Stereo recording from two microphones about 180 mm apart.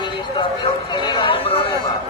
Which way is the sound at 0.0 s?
25° left (ahead or behind).